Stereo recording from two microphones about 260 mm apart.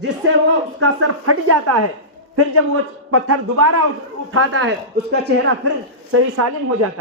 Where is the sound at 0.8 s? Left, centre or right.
Right.